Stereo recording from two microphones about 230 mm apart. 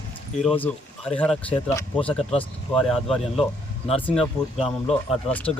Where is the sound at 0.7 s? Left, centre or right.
Centre.